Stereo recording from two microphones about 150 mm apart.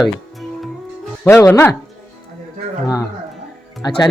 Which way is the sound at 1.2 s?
15° left (ahead or behind).